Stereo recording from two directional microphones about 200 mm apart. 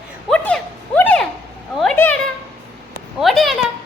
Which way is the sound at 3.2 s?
Centre (ahead or behind).